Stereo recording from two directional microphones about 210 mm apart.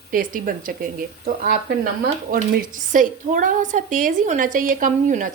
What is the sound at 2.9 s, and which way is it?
A woman's voice, 40° right (ahead or behind).